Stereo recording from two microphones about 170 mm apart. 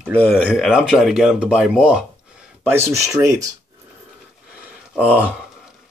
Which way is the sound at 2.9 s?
20° right (ahead or behind).